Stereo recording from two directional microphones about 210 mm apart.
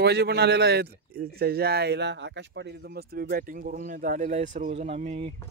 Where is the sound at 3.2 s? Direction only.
40° right (ahead or behind).